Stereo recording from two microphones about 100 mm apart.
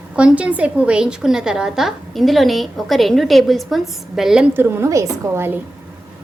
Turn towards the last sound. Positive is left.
turn(degrees=-25)  # may be behind; listen again after turning